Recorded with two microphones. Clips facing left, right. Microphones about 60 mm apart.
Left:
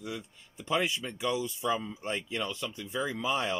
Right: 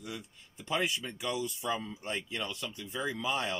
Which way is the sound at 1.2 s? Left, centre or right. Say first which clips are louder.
Left 5 dB; left.